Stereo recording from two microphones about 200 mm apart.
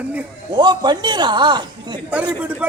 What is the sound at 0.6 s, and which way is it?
A man's voice, 20° right (ahead or behind).